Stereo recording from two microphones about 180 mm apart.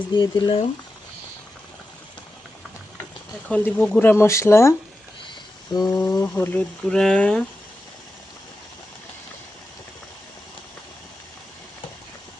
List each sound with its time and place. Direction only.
0.1 s speech: 25° left (ahead or behind)
3.5 s speech: 10° left (ahead or behind)
5.7 s speech: 20° left (ahead or behind); by 7.4 s 5° left (ahead or behind)